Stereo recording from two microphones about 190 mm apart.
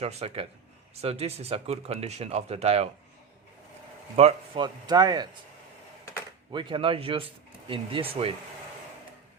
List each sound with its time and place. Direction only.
0.0 s speech: 35° right (ahead or behind)
4.2 s speech: 30° right (ahead or behind)
6.5 s speech: 25° right (ahead or behind)